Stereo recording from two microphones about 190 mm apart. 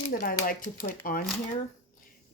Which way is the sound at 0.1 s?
50° left (ahead or behind).